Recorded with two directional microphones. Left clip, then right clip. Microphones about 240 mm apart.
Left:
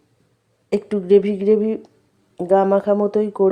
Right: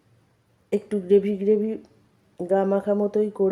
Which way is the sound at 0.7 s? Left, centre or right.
Left.